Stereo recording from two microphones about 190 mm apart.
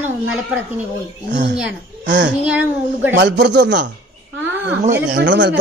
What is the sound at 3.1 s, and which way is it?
Speech, 65° right (ahead or behind).